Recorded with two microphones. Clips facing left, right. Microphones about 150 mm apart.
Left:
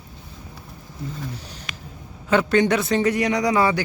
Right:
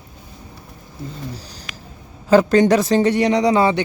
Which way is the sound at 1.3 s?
35° right (ahead or behind).